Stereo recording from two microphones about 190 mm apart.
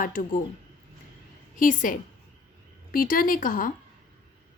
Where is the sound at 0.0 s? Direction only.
45° left (ahead or behind).